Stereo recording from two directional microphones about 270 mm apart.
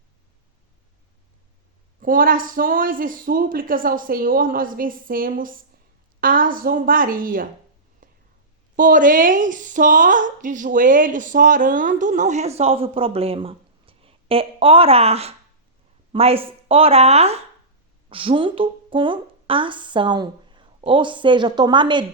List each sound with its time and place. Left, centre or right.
2.0 s a woman's voice: right
8.0 s whispering: right
8.7 s a woman's voice: right